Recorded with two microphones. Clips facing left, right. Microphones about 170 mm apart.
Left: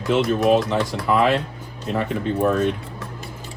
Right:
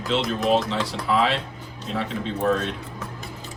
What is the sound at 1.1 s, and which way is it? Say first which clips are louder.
Speech: left 4 dB; 55° left (ahead or behind).